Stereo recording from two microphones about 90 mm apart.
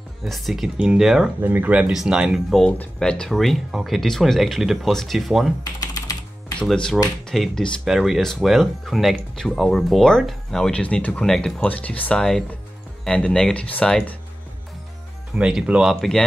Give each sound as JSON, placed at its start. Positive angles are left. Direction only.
{"t": 0.2, "sound": "speech", "side_deg": 0}
{"t": 1.4, "sound": "speech", "side_deg": -20}
{"t": 1.9, "sound": "speech", "side_deg": -5}
{"t": 2.6, "sound": "speech", "side_deg": 10}
{"t": 5.6, "sound": "typing", "side_deg": 45}
{"t": 6.6, "sound": "speech", "side_deg": 5}
{"t": 15.3, "sound": "speech", "side_deg": -10}
{"t": 15.9, "sound": "speech", "side_deg": 5}